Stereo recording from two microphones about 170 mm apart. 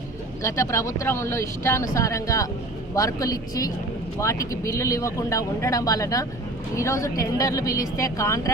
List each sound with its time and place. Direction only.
0.4 s speech: 20° left (ahead or behind)